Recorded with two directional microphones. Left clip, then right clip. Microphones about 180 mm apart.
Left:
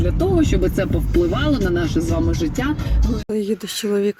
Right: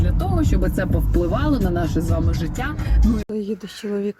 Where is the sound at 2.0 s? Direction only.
30° right (ahead or behind).